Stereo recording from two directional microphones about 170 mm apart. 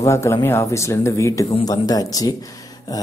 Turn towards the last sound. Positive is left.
turn(degrees=20)  # may be behind; listen again after turning